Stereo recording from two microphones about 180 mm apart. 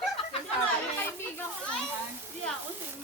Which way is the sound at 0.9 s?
10° left (ahead or behind).